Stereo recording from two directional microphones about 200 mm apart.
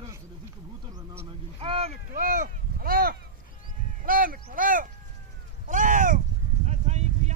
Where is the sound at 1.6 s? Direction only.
30° right (ahead or behind).